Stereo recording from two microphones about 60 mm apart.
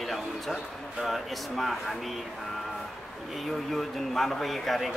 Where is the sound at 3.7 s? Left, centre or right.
Centre.